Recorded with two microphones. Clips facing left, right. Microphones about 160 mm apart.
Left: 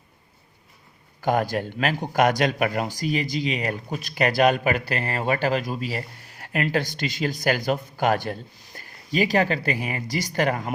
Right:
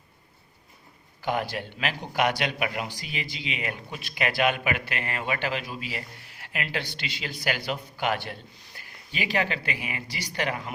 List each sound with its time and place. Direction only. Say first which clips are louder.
1.2 s speech: left 6 dB; 45° left (ahead or behind)